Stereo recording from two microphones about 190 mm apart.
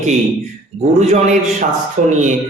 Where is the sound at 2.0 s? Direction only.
40° right (ahead or behind).